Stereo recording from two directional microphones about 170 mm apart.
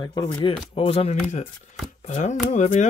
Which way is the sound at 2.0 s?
45° left (ahead or behind).